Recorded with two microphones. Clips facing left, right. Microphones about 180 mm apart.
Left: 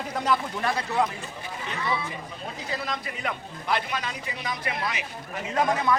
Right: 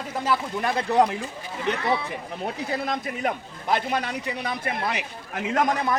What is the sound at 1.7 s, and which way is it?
A man's voice, 60° right (ahead or behind).